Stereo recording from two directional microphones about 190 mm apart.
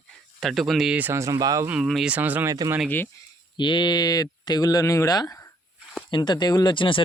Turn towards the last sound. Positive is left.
turn(degrees=25)  # may be behind; listen again after turning